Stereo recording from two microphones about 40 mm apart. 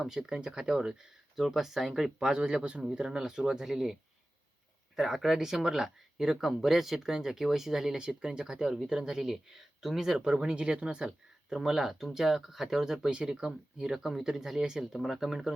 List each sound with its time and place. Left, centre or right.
0.0 s speech: centre
1.4 s speech: centre
2.3 s speech: right
4.9 s speech: centre
7.9 s speech: centre
10.3 s speech: right; by 13.1 s centre
13.1 s speech: right
13.9 s speech: centre
14.9 s speech: centre